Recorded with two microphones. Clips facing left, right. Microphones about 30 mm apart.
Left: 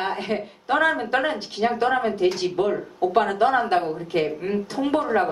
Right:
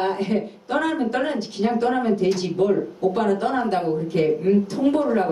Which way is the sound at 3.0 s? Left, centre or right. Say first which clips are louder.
Left 4 dB; left.